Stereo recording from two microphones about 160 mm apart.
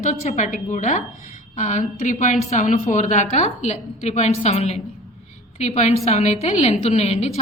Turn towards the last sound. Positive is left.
turn(degrees=40)  # may be behind; listen again after turning